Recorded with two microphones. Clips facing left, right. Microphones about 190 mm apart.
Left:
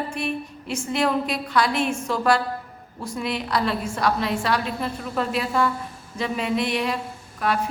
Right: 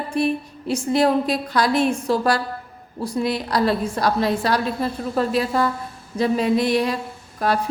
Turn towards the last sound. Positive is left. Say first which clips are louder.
# right 3 dB
turn(degrees=-40)  # may be behind; listen again after turning